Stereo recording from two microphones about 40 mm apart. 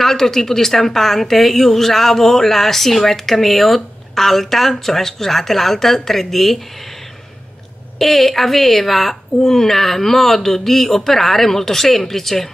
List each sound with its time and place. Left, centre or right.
0.0 s a woman's voice: centre
8.0 s a woman's voice: centre